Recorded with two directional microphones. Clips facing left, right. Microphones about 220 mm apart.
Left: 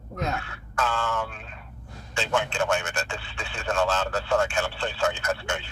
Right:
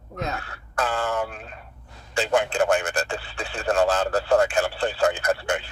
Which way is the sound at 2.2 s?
35° right (ahead or behind).